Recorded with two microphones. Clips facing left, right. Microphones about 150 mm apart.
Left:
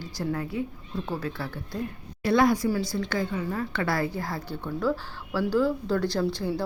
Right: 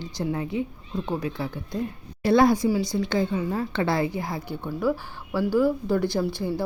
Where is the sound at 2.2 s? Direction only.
30° right (ahead or behind).